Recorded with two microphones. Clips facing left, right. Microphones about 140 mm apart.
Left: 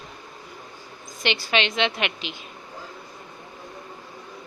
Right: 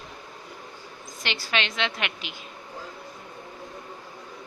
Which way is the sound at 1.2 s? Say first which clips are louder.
Left 5 dB; 20° left (ahead or behind).